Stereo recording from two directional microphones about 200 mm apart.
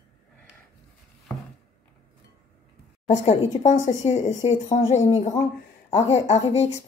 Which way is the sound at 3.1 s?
35° left (ahead or behind).